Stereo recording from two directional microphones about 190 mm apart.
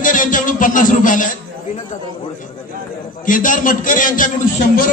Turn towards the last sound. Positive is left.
turn(degrees=45)  # may be behind; listen again after turning